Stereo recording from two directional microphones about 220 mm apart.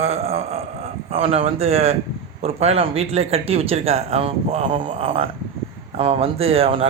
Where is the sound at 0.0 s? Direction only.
30° right (ahead or behind).